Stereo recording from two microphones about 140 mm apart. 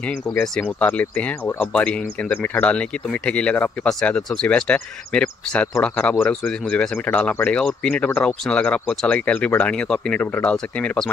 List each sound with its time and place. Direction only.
0.3 s speech: 10° left (ahead or behind)